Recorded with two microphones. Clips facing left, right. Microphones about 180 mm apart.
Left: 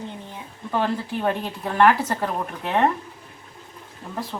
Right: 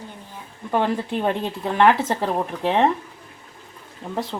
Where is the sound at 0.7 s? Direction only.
15° right (ahead or behind).